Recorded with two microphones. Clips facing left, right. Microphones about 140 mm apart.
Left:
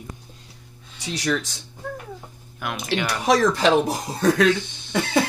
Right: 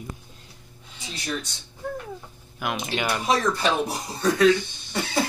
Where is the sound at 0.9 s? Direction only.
85° left.